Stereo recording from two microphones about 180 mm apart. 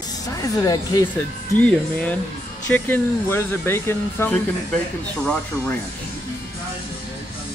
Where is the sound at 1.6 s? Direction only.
5° left (ahead or behind).